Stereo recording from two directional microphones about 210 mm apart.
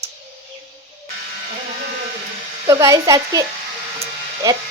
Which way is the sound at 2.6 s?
15° right (ahead or behind).